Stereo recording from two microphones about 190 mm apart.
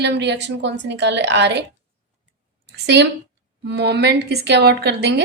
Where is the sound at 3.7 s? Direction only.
60° right (ahead or behind).